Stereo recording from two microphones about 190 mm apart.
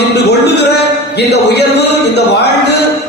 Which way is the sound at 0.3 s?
60° left (ahead or behind).